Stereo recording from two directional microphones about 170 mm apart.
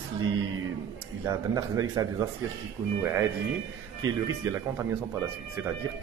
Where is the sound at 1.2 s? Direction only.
20° right (ahead or behind).